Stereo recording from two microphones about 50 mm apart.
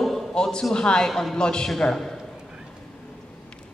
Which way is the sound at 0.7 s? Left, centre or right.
Centre.